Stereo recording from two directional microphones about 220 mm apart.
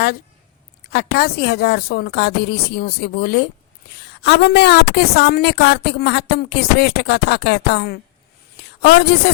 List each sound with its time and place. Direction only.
0.9 s a woman's voice: 45° left (ahead or behind)